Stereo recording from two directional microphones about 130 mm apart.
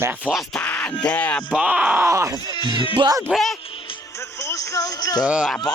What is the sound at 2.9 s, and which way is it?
Speech, 35° right (ahead or behind).